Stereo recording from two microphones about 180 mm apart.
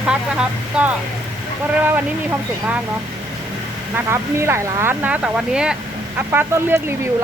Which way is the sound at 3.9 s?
15° right (ahead or behind).